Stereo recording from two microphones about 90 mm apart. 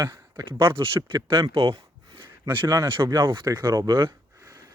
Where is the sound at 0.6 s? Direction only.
75° right (ahead or behind).